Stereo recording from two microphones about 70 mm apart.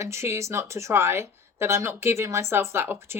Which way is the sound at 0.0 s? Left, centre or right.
Right.